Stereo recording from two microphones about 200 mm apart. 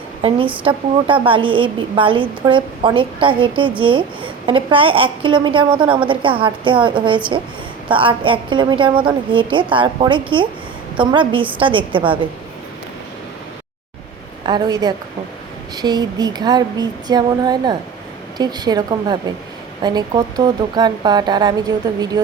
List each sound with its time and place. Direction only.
0.6 s a woman's voice: 25° right (ahead or behind)
14.4 s a woman's voice: 20° right (ahead or behind)